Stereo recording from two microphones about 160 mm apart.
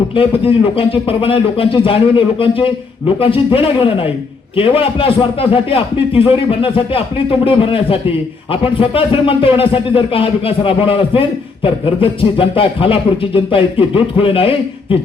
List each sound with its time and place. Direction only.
0.2 s speech: 35° left (ahead or behind)